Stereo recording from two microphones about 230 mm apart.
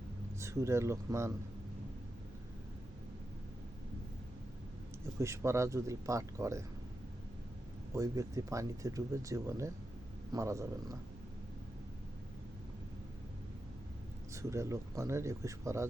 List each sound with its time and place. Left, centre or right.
0.3 s speech: centre
5.2 s speech: centre
7.9 s speech: centre
14.3 s speech: centre